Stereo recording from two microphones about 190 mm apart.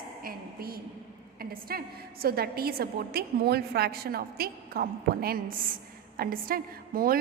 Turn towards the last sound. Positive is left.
turn(degrees=-50)  # may be behind; listen again after turning